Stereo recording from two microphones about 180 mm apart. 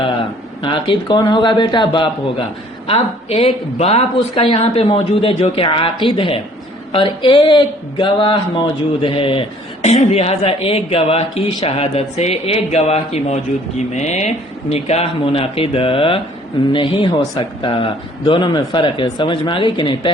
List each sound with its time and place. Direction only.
0.6 s a woman's voice: 25° left (ahead or behind)